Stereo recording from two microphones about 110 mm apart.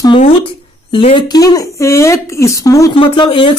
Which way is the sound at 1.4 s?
30° left (ahead or behind).